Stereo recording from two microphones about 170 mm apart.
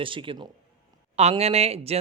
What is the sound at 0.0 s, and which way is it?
Speech, 30° right (ahead or behind).